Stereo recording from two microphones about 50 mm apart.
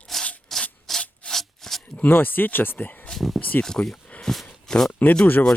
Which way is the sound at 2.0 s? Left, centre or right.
Left.